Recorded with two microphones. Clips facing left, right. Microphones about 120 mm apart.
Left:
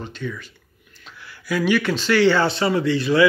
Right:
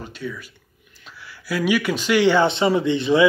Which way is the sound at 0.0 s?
10° right (ahead or behind).